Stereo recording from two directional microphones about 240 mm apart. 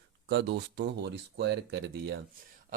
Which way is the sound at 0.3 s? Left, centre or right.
Right.